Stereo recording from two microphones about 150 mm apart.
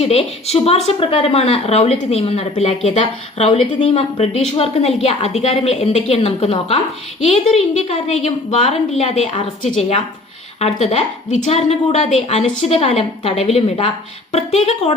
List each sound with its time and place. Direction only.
0.0 s speech: 45° left (ahead or behind)
10.6 s speech: 45° left (ahead or behind)